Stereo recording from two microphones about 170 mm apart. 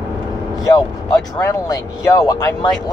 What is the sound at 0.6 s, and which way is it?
Speech, 20° left (ahead or behind).